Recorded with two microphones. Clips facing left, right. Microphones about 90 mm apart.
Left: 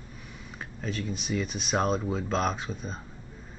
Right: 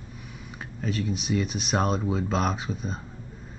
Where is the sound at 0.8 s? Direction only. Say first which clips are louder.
Right 4 dB; centre (ahead or behind).